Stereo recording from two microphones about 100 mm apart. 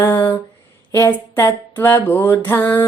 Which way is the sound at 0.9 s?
30° left (ahead or behind).